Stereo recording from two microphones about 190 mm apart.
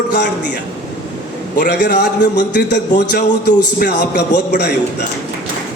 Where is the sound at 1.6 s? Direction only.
55° left (ahead or behind).